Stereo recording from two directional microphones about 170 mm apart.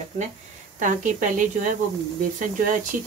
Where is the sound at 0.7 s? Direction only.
50° right (ahead or behind).